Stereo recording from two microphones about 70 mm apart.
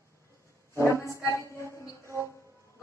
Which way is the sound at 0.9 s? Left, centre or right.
Left.